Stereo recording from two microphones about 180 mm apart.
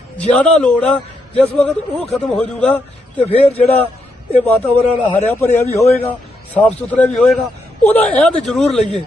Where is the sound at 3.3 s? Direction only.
35° left (ahead or behind).